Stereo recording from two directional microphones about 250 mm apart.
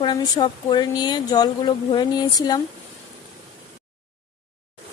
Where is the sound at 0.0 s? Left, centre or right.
Centre.